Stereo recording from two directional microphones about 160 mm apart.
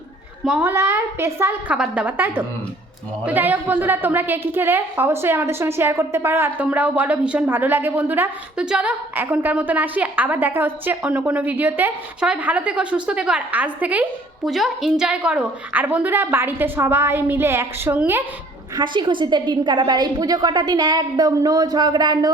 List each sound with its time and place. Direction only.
0.4 s a child's voice: 5° right (ahead or behind)
18.8 s a woman's voice: 30° right (ahead or behind)